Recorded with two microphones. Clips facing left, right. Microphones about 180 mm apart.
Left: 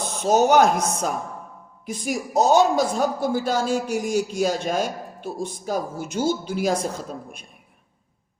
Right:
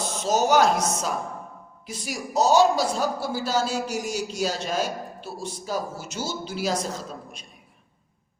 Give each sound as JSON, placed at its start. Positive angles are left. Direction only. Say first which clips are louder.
{"t": 0.0, "sound": "a man's voice", "louder": "left 4 dB", "side_deg": 55}